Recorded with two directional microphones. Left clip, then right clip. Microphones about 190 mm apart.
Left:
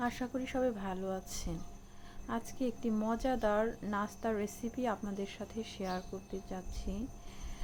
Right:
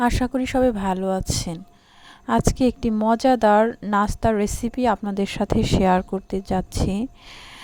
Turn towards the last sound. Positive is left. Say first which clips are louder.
# right 16 dB
turn(degrees=-60)  # may be behind; listen again after turning